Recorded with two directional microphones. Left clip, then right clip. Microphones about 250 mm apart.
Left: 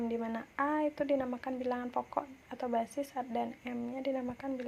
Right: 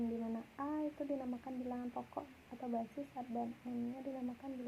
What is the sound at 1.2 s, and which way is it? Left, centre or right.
Speech, left.